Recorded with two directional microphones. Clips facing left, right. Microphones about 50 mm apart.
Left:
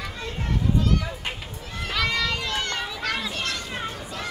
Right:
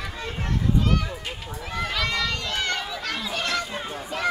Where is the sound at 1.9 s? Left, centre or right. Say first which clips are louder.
Left 3 dB; centre.